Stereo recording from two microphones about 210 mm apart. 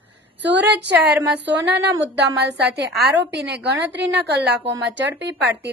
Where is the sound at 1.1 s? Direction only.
5° right (ahead or behind).